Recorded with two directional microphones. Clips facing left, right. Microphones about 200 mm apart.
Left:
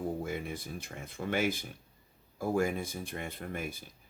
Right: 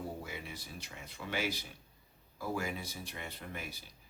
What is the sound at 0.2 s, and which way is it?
Speech, 50° left (ahead or behind).